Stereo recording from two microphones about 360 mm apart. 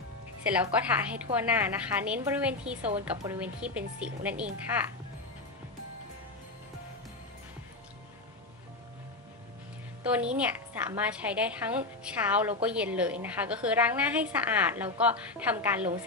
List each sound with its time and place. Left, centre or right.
0.5 s a woman's voice: centre
10.0 s a woman's voice: centre